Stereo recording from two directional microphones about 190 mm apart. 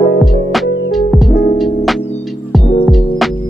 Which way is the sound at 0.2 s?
Centre (ahead or behind).